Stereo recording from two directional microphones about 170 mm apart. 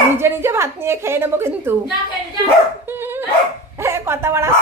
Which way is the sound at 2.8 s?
10° right (ahead or behind).